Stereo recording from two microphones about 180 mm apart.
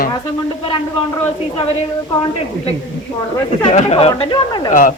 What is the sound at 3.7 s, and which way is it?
Speech, 35° left (ahead or behind).